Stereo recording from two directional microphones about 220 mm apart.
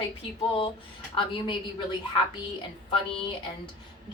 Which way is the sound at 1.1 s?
20° left (ahead or behind).